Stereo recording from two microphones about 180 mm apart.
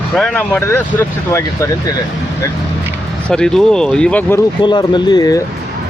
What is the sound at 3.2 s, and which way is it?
Speech, 5° left (ahead or behind).